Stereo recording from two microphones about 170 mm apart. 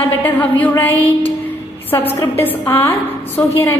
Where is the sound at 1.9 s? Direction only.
15° left (ahead or behind).